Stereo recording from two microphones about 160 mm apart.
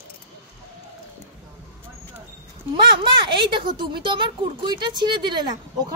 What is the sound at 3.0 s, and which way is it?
A woman's voice, 30° right (ahead or behind).